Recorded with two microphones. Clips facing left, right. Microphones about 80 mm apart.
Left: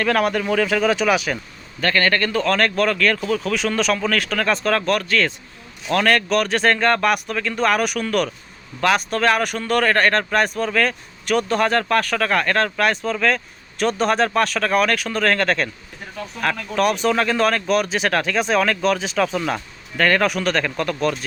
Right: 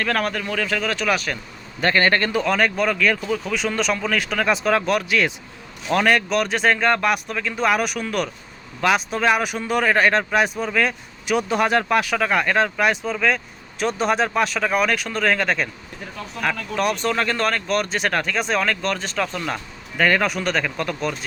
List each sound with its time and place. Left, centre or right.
0.0 s speech: centre
1.8 s speech: right
2.4 s speech: centre